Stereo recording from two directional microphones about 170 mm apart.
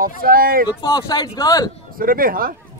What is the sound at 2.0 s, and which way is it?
Speech, 55° right (ahead or behind).